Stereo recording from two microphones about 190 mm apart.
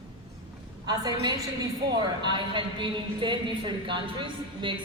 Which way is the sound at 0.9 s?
20° right (ahead or behind).